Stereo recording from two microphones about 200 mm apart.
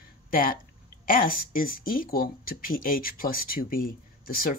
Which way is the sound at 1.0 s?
45° left (ahead or behind).